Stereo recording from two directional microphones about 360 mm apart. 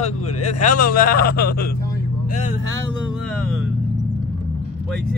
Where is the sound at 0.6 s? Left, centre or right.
Left.